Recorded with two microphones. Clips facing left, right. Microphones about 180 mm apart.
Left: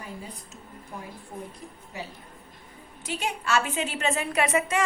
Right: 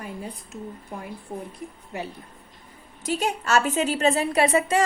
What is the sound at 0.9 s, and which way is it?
A woman's voice, 65° right (ahead or behind).